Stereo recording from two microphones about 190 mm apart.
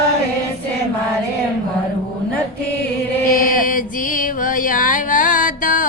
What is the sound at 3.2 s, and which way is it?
Chant, 45° left (ahead or behind).